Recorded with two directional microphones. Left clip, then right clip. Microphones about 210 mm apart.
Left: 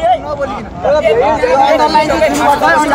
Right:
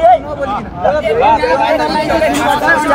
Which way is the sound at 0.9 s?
25° left (ahead or behind).